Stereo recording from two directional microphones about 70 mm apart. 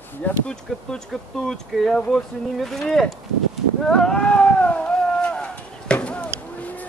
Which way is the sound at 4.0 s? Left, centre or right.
Centre.